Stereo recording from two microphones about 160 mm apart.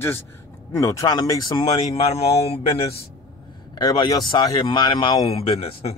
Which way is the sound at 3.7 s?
25° left (ahead or behind).